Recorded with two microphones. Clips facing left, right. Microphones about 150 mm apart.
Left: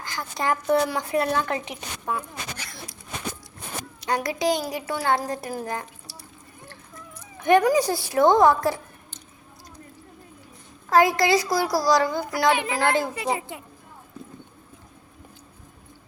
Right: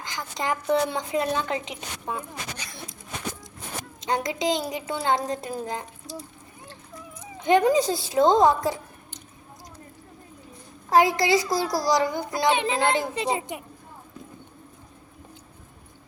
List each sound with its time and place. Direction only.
0.0 s a woman's voice: 15° right (ahead or behind)
4.0 s a woman's voice: 20° right (ahead or behind)
7.2 s speech: 15° right (ahead or behind)
10.8 s a woman's voice: 15° right (ahead or behind)